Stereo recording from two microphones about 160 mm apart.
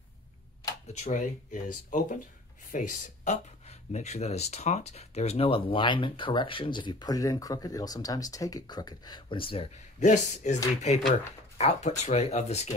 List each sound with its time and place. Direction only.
0.9 s speech: 50° left (ahead or behind)